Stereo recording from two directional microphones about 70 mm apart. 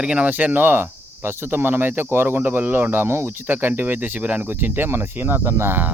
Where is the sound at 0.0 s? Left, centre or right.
Centre.